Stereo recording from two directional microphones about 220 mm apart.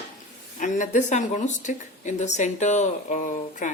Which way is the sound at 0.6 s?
35° left (ahead or behind).